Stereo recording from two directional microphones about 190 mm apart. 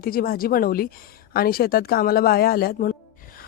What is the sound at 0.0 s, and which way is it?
Speech, 50° left (ahead or behind).